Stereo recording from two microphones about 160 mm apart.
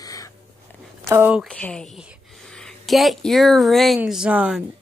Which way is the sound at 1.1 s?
10° right (ahead or behind).